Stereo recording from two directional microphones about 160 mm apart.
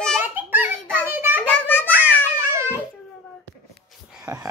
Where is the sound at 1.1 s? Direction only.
10° right (ahead or behind).